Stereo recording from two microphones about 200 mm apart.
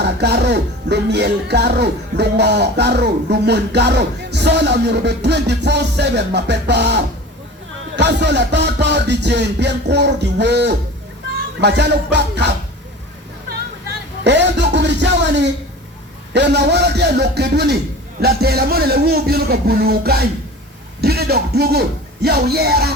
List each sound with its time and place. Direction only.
0.0 s speech: 55° right (ahead or behind)
14.3 s a man's voice: 60° right (ahead or behind)